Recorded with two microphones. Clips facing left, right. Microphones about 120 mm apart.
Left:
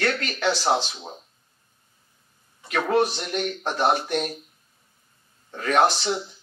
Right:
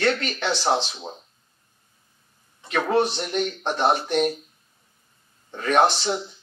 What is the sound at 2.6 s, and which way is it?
Speech, 25° right (ahead or behind).